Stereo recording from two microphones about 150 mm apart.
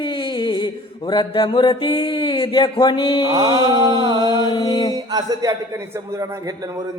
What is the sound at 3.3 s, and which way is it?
A man's voice, 25° right (ahead or behind).